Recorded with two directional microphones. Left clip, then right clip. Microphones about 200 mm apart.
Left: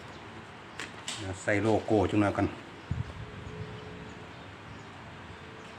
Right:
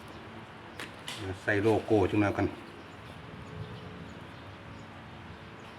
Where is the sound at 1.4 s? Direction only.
30° left (ahead or behind).